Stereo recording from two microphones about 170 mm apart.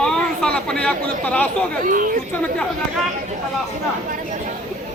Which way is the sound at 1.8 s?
55° right (ahead or behind).